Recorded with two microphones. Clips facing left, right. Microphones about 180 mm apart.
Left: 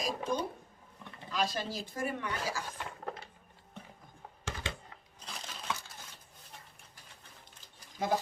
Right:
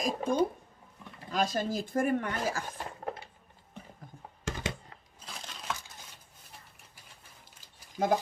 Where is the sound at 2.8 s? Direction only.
40° right (ahead or behind).